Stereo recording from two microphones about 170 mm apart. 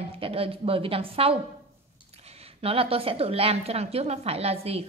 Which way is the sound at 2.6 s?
35° right (ahead or behind).